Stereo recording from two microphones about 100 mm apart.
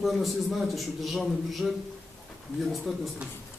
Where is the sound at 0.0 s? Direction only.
Centre (ahead or behind).